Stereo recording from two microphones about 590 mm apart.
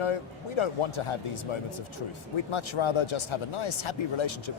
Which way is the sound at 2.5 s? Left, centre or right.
Left.